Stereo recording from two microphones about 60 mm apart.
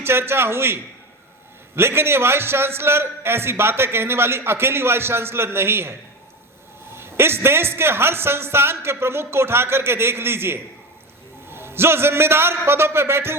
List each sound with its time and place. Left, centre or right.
0.0 s a man's voice: right
6.9 s a man's voice: right